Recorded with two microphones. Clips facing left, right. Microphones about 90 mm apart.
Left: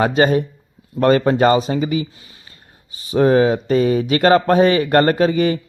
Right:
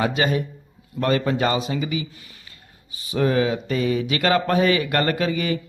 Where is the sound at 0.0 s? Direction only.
40° left (ahead or behind).